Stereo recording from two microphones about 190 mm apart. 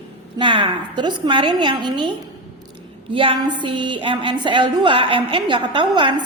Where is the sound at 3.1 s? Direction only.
30° right (ahead or behind).